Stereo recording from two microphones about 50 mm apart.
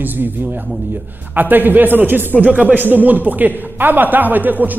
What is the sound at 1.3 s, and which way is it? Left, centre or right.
A man's voice, right.